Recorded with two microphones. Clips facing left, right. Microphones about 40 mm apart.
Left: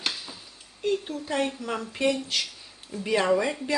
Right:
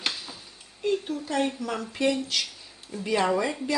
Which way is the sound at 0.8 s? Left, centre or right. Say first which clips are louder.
Right 1 dB; centre.